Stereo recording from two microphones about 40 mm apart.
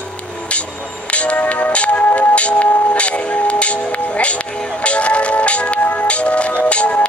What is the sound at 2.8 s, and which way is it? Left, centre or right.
Speech, left.